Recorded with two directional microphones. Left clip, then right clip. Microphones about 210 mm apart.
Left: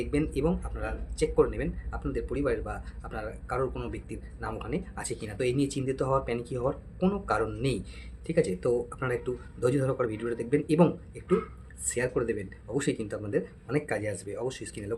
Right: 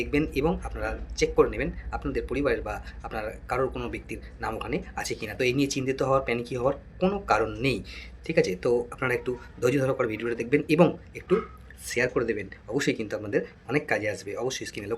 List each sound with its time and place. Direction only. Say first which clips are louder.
0.0 s speech: right 3 dB; 15° left (ahead or behind)